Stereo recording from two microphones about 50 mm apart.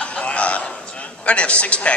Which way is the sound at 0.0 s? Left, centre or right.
Left.